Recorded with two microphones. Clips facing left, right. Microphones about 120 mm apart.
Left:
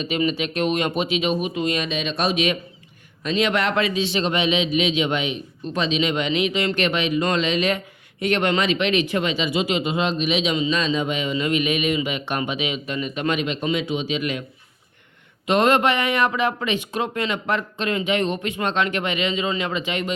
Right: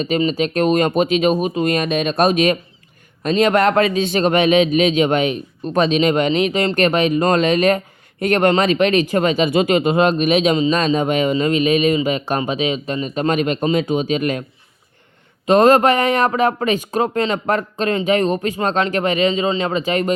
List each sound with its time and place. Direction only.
0.2 s speech: 35° right (ahead or behind)
15.4 s speech: 40° right (ahead or behind)